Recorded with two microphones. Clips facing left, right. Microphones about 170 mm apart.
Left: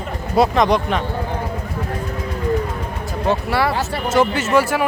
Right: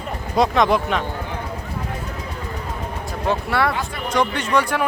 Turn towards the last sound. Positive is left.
turn(degrees=5)  # may be behind; listen again after turning